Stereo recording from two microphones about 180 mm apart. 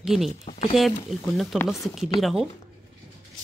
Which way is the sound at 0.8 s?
Centre (ahead or behind).